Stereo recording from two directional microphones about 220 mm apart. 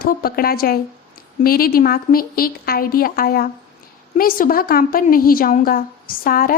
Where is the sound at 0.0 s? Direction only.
40° left (ahead or behind).